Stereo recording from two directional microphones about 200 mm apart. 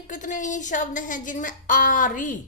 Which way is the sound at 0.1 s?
40° left (ahead or behind).